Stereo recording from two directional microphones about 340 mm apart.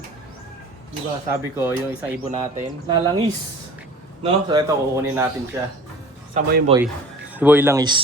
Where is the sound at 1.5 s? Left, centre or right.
Centre.